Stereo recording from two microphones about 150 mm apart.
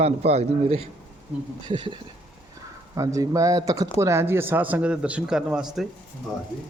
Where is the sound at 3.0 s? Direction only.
20° right (ahead or behind); by 5.9 s 5° right (ahead or behind).